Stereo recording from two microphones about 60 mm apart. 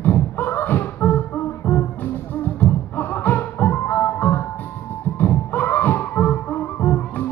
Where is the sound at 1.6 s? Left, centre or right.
Left.